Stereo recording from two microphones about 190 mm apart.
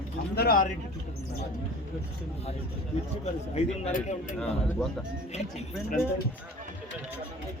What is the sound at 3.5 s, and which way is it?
A man's voice, 45° left (ahead or behind).